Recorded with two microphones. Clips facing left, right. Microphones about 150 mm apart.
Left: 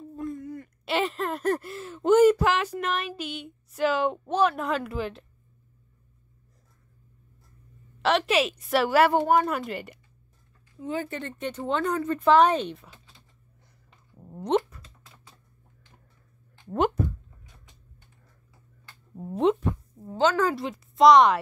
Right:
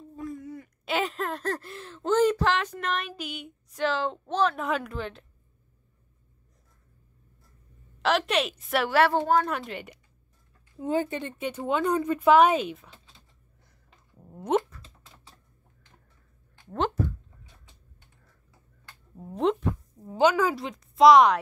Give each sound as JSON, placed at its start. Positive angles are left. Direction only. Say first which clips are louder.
{"t": 0.1, "sound": "a sound", "louder": "left 2 dB", "side_deg": 0}
{"t": 2.0, "sound": "speech", "louder": "left 5 dB", "side_deg": 10}
{"t": 4.6, "sound": "a woman's voice", "louder": "left 1 dB", "side_deg": 0}
{"t": 8.0, "sound": "a woman's voice", "louder": "left 2 dB", "side_deg": 0}
{"t": 9.5, "sound": "a woman's voice", "louder": "left 2 dB", "side_deg": 0}
{"t": 10.8, "sound": "speech", "louder": "right 4 dB", "side_deg": -35}
{"t": 11.1, "sound": "speech", "louder": "right 1 dB", "side_deg": -15}
{"t": 14.1, "sound": "a sound", "louder": "left 4 dB", "side_deg": 5}
{"t": 19.1, "sound": "a woman's voice", "louder": "left 3 dB", "side_deg": 5}
{"t": 19.7, "sound": "a sound", "louder": "left 1 dB", "side_deg": 0}
{"t": 20.2, "sound": "speech", "louder": "right 1 dB", "side_deg": -10}
{"t": 20.5, "sound": "a woman's voice", "louder": "left 1 dB", "side_deg": 0}